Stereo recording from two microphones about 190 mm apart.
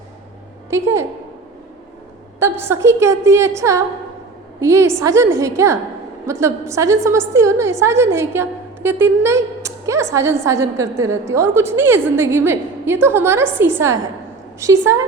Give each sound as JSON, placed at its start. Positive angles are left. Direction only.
{"t": 0.7, "sound": "a woman's voice", "side_deg": -15}
{"t": 2.4, "sound": "a woman's voice", "side_deg": -15}